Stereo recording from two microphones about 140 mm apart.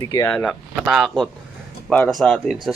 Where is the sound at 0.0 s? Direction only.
25° left (ahead or behind).